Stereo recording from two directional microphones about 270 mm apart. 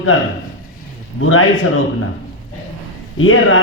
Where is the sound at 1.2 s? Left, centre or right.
Left.